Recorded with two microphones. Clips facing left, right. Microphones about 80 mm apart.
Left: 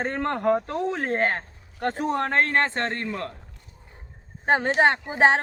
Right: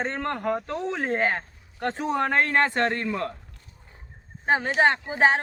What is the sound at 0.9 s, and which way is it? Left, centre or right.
Speech, centre.